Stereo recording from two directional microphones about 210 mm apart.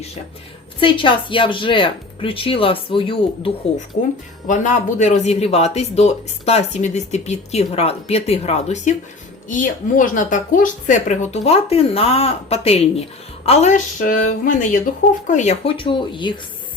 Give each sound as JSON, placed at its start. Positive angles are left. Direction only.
{"t": 0.8, "sound": "speech", "side_deg": 25}
{"t": 4.0, "sound": "speech", "side_deg": 35}